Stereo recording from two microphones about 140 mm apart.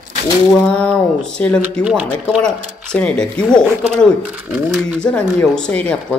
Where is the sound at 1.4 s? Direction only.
10° left (ahead or behind).